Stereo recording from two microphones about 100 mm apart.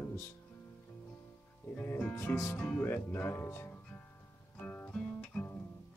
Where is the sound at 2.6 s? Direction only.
10° left (ahead or behind).